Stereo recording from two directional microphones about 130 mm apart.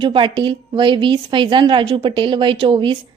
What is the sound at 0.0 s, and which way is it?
A woman's voice, 40° right (ahead or behind).